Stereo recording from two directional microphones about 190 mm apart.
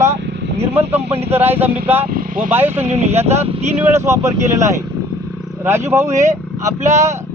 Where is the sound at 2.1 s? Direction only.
45° right (ahead or behind).